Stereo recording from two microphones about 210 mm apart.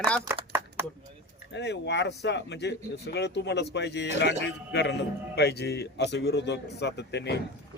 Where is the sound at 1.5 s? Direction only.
55° left (ahead or behind).